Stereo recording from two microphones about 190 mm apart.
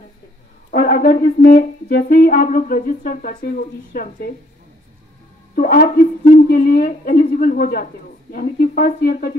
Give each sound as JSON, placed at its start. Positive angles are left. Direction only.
{"t": 0.7, "sound": "a woman's voice", "side_deg": 45}
{"t": 5.6, "sound": "a woman's voice", "side_deg": 50}